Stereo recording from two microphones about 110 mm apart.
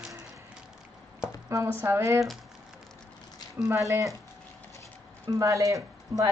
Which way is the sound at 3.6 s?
30° right (ahead or behind).